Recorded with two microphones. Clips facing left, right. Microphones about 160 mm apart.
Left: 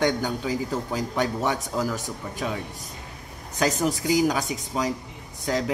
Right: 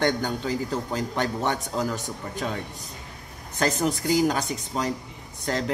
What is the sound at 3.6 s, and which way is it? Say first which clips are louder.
A man's voice: left 1 dB; 5° left (ahead or behind).